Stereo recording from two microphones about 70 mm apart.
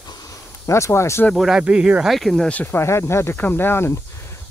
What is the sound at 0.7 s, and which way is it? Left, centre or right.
Speech, left.